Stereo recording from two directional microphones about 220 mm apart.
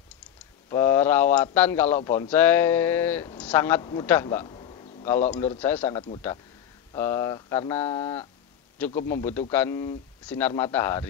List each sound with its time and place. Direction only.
0.7 s speech: 10° left (ahead or behind)
4.5 s a sound: 25° left (ahead or behind)
5.0 s speech: 10° left (ahead or behind)
7.0 s speech: 15° left (ahead or behind)
8.8 s a man's voice: 5° left (ahead or behind)